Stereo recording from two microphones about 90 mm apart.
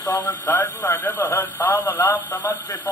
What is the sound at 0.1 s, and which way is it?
Male singing, 50° left (ahead or behind).